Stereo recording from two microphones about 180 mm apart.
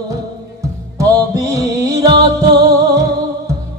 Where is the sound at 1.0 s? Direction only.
20° right (ahead or behind).